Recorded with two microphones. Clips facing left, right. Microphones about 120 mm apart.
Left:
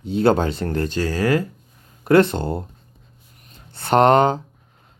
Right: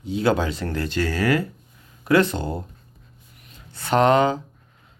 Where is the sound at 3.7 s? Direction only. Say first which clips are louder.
Left 3 dB; 55° left (ahead or behind).